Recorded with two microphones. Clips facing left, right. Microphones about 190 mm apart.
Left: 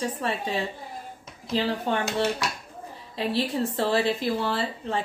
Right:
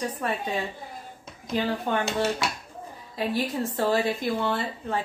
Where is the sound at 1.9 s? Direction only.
30° left (ahead or behind).